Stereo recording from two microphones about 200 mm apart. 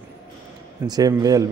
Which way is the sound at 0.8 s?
20° right (ahead or behind).